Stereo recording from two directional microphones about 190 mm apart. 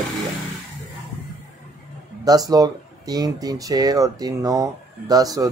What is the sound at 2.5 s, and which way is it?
Speech, 20° right (ahead or behind).